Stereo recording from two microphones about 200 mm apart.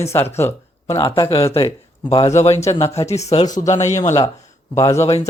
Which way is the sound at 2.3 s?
35° left (ahead or behind).